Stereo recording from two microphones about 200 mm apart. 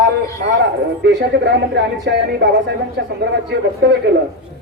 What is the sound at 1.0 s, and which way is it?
A woman's voice, 55° right (ahead or behind).